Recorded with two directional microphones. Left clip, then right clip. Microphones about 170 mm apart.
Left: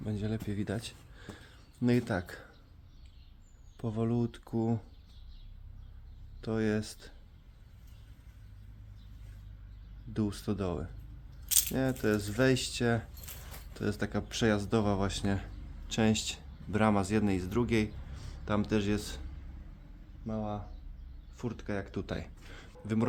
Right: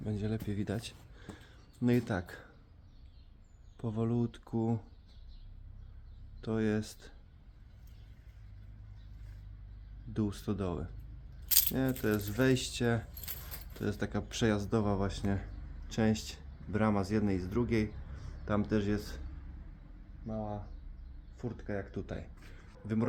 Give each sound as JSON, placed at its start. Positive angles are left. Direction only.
{"t": 0.0, "sound": "speech", "side_deg": 0}
{"t": 3.8, "sound": "speech", "side_deg": 5}
{"t": 6.4, "sound": "speech", "side_deg": 5}
{"t": 10.2, "sound": "speech", "side_deg": 5}
{"t": 13.3, "sound": "keys jangling", "side_deg": -15}
{"t": 13.7, "sound": "a man's voice", "side_deg": 5}
{"t": 20.2, "sound": "speech", "side_deg": 20}
{"t": 22.0, "sound": "a sound", "side_deg": 40}